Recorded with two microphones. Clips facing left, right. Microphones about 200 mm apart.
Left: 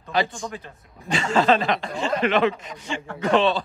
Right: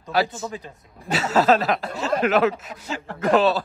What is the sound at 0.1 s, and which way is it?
Speech, 5° right (ahead or behind).